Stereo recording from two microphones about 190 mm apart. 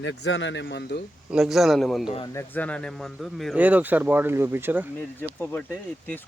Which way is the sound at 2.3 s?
10° left (ahead or behind).